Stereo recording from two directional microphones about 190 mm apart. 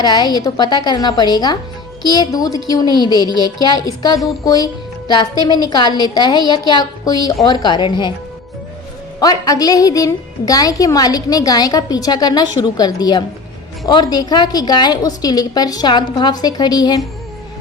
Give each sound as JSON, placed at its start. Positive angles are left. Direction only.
{"t": 0.0, "sound": "a woman's voice", "side_deg": 20}
{"t": 9.2, "sound": "a woman's voice", "side_deg": 20}